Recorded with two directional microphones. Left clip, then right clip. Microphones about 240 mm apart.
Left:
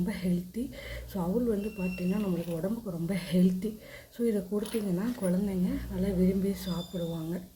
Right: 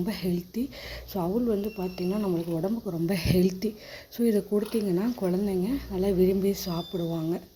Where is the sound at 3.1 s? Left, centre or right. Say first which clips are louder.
Right 5 dB; right.